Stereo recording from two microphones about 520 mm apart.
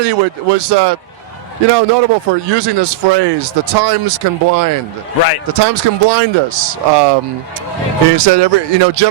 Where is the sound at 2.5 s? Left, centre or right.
Right.